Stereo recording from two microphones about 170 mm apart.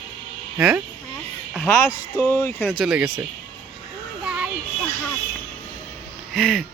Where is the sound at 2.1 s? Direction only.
15° left (ahead or behind).